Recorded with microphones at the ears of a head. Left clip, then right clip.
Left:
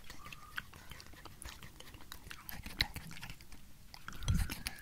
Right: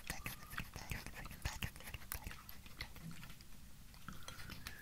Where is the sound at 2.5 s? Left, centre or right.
Left.